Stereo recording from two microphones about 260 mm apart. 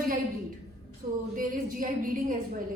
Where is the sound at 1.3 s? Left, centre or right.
Right.